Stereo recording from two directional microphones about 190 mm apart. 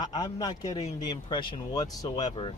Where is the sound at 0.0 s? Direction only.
20° left (ahead or behind).